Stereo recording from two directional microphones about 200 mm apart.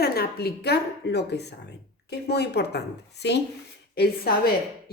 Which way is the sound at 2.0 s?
55° left (ahead or behind).